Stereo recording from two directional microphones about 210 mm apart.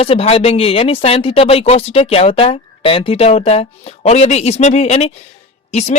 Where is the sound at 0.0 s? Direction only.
30° left (ahead or behind).